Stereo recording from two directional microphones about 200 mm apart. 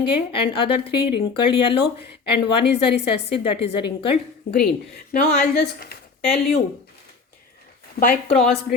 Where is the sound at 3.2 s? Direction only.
30° left (ahead or behind).